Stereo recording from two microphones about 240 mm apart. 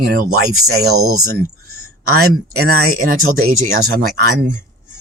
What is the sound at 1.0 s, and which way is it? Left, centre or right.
Speech, right.